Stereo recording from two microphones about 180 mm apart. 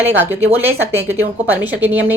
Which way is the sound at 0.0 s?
10° right (ahead or behind).